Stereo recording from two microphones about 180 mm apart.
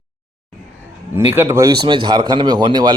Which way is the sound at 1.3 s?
15° right (ahead or behind).